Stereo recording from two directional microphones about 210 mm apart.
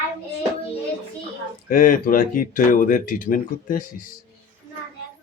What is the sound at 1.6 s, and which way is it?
Speech, 40° left (ahead or behind).